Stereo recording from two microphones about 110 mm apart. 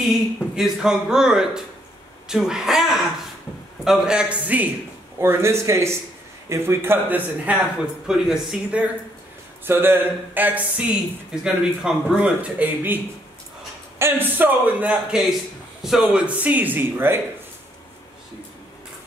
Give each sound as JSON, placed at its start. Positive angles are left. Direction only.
{"t": 0.0, "sound": "a woman's voice", "side_deg": 0}
{"t": 5.2, "sound": "a man's voice", "side_deg": -25}
{"t": 8.1, "sound": "speech", "side_deg": -5}
{"t": 9.7, "sound": "a man's voice", "side_deg": -20}
{"t": 16.3, "sound": "a man's voice", "side_deg": -15}